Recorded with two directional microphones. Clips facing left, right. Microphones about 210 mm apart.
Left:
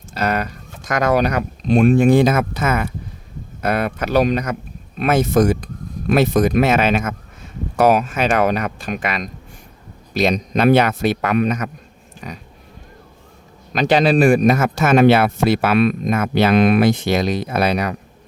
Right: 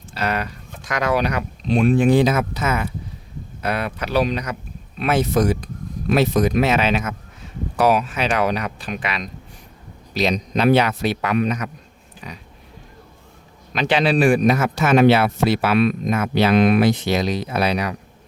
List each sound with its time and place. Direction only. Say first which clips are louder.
0.1 s a man's voice: left 3 dB; 45° left (ahead or behind)
13.7 s a man's voice: left 4 dB; 40° left (ahead or behind)